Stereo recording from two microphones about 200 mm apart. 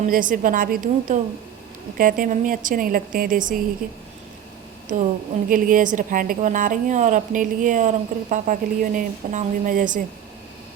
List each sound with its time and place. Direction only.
0.0 s a woman's voice: 40° right (ahead or behind)
3.8 s speech: 5° right (ahead or behind)
5.5 s a woman's voice: 45° right (ahead or behind)